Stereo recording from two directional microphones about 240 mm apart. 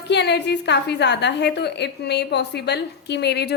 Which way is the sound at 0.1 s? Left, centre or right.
Left.